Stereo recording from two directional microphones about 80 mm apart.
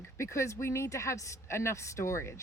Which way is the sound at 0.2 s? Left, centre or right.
Left.